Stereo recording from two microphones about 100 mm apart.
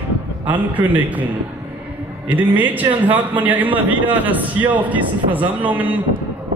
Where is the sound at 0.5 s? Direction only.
15° right (ahead or behind).